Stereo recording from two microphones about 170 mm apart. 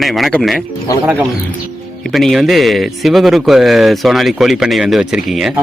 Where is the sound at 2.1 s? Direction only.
Centre (ahead or behind).